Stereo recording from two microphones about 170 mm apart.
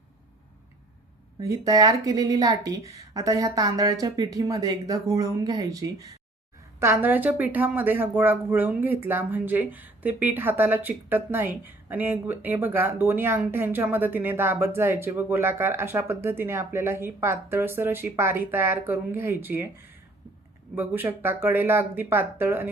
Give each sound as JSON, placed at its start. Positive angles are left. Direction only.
{"t": 1.4, "sound": "speech", "side_deg": -20}